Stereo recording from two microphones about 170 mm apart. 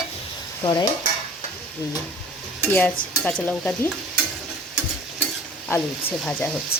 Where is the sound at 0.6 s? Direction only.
25° left (ahead or behind).